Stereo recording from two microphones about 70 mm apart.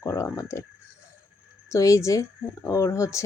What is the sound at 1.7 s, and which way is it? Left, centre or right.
Speech, left.